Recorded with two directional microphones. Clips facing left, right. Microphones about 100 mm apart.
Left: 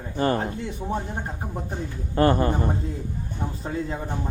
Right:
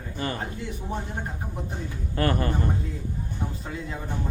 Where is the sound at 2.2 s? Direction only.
25° left (ahead or behind).